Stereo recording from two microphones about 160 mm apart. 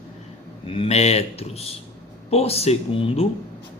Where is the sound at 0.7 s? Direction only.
40° left (ahead or behind).